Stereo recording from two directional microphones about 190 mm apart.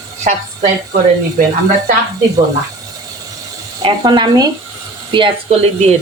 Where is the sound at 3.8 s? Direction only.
25° right (ahead or behind).